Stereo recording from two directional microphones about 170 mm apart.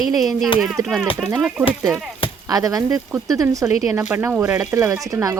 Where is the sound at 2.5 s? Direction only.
20° right (ahead or behind).